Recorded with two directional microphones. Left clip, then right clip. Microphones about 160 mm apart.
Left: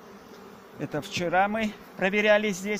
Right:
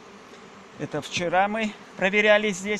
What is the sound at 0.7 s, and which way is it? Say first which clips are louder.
A man's voice: right 2 dB; 20° right (ahead or behind).